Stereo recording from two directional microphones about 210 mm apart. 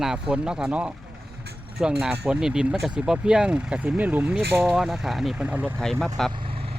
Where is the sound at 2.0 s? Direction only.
5° right (ahead or behind).